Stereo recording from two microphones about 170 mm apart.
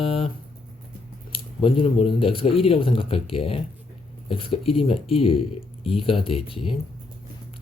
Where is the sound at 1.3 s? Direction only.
30° left (ahead or behind).